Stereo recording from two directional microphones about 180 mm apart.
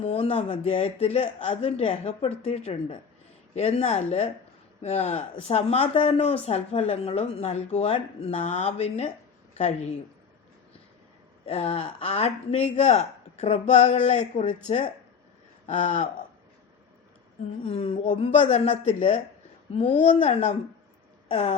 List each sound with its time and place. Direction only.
0.0 s speech: 30° left (ahead or behind)
11.4 s speech: 35° left (ahead or behind)
15.6 s speech: 40° left (ahead or behind)
17.6 s speech: 30° left (ahead or behind)
21.2 s a sound: 35° left (ahead or behind)